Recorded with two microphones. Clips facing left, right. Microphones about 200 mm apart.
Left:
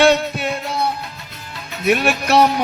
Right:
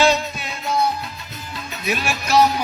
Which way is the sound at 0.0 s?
60° left (ahead or behind).